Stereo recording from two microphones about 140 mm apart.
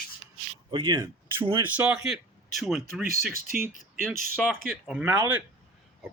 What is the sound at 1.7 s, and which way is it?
Speech, 5° right (ahead or behind).